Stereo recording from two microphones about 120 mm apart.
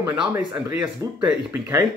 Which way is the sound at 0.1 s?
10° right (ahead or behind).